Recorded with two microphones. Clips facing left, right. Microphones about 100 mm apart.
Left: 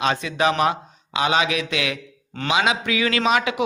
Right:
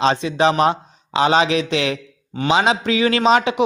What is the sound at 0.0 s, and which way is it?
A man's voice, 30° right (ahead or behind).